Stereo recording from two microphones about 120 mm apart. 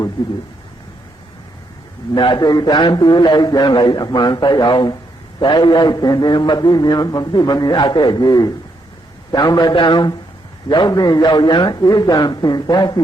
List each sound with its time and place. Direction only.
2.1 s a man's voice: 40° left (ahead or behind)